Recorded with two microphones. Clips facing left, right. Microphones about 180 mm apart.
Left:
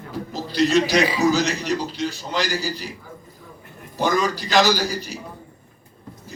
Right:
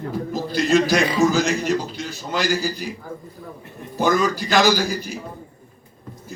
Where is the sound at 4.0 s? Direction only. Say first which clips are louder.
Right 2 dB; 50° right (ahead or behind).